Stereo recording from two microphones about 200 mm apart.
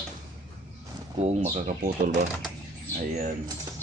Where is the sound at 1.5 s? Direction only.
40° right (ahead or behind).